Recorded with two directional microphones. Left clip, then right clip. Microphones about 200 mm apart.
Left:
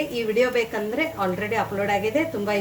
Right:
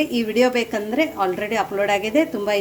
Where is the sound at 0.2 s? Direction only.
50° right (ahead or behind).